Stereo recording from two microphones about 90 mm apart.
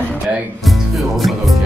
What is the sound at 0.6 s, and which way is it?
Music, centre (ahead or behind).